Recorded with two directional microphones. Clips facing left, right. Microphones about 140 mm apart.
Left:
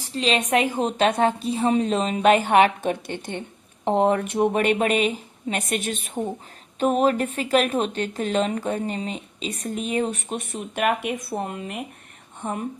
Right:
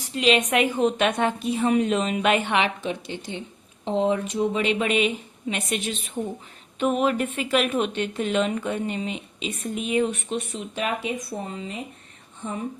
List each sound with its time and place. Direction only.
0.1 s a woman's voice: 35° left (ahead or behind); by 6.1 s 50° left (ahead or behind)
6.7 s speech: 40° left (ahead or behind); by 12.6 s 55° left (ahead or behind)